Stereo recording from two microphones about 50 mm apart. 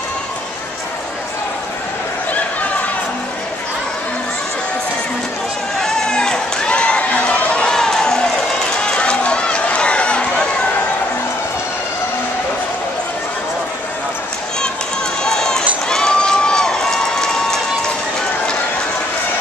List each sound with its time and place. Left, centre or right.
5.8 s a sound: centre
7.6 s run: centre
15.2 s run: centre